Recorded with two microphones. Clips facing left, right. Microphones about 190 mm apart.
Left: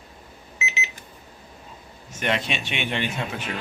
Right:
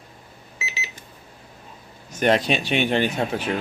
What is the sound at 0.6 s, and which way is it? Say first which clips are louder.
Alarm clock: left 3 dB; 35° right (ahead or behind).